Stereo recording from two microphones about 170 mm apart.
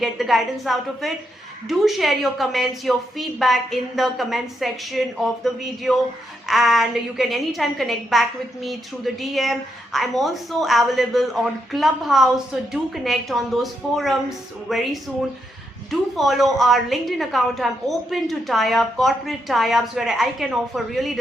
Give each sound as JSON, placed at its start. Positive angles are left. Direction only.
{"t": 0.0, "sound": "a woman's voice", "side_deg": 0}